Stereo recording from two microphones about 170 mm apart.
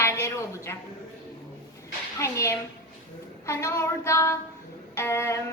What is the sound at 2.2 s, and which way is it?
A woman's voice, 15° left (ahead or behind).